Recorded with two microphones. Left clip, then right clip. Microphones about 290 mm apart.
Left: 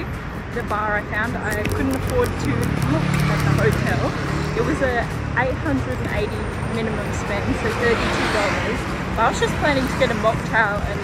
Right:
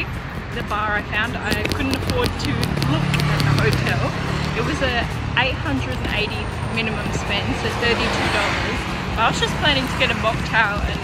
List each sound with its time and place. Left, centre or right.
0.8 s speech: centre
4.8 s speech: centre
9.2 s speech: centre